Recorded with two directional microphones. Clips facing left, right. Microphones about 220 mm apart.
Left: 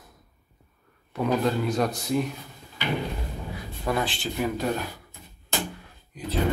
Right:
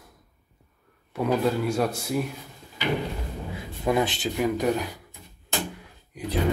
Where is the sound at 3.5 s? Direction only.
20° right (ahead or behind).